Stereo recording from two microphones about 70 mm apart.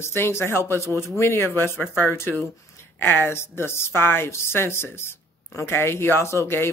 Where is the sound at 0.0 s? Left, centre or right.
Left.